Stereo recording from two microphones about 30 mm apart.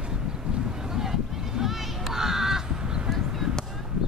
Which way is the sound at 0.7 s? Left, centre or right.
Centre.